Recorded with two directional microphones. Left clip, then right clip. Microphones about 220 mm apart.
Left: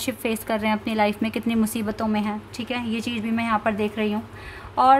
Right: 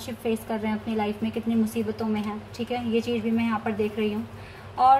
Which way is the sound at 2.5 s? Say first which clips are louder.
Right 5 dB; 50° left (ahead or behind).